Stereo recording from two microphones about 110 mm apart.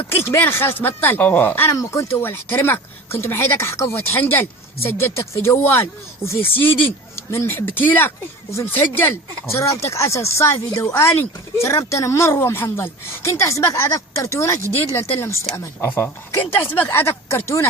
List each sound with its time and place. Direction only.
0.2 s speech: 20° left (ahead or behind)